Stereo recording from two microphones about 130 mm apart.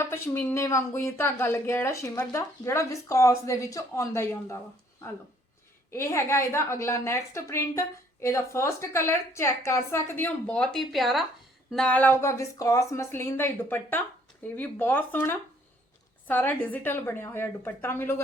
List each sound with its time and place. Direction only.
0.0 s a woman's voice: 20° left (ahead or behind)
5.9 s a woman's voice: 20° left (ahead or behind)